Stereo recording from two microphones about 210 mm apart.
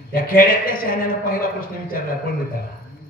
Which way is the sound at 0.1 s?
40° left (ahead or behind).